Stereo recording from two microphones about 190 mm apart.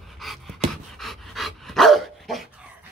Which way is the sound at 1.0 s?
Centre (ahead or behind).